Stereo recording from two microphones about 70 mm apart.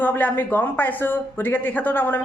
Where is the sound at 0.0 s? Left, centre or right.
Left.